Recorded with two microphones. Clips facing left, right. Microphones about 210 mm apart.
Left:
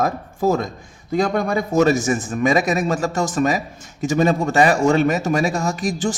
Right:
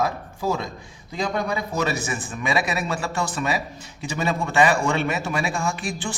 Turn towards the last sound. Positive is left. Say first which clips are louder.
# left 6 dB
turn(degrees=40)  # may be behind; listen again after turning